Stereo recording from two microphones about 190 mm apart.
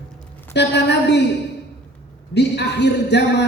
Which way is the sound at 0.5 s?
65° left (ahead or behind).